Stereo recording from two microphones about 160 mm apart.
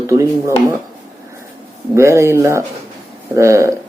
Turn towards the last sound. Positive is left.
turn(degrees=-20)  # may be behind; listen again after turning